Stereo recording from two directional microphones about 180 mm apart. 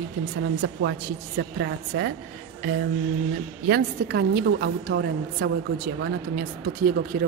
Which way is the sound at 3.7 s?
65° right (ahead or behind).